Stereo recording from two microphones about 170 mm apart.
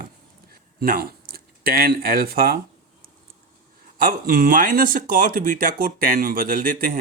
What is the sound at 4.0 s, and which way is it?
Speech, 60° right (ahead or behind).